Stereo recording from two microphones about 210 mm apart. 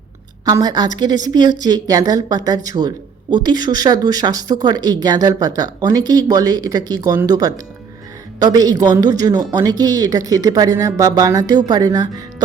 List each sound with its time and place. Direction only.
0.4 s a woman's voice: 20° right (ahead or behind)